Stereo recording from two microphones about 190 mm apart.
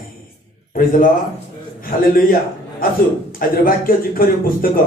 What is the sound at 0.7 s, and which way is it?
A man's voice, 45° left (ahead or behind).